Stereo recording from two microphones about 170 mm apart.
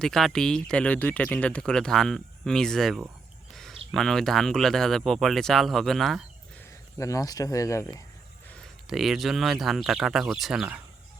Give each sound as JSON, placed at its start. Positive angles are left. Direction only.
{"t": 0.0, "sound": "speech", "side_deg": 0}
{"t": 3.5, "sound": "a sound", "side_deg": 0}
{"t": 3.9, "sound": "speech", "side_deg": 0}
{"t": 6.6, "sound": "speech", "side_deg": 15}
{"t": 8.4, "sound": "speech", "side_deg": 5}